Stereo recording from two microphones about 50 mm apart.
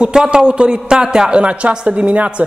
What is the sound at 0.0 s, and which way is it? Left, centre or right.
A woman's voice, centre.